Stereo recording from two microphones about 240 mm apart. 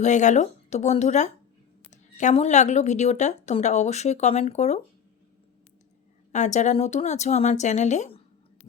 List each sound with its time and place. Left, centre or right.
0.0 s a woman's voice: left
6.3 s a woman's voice: left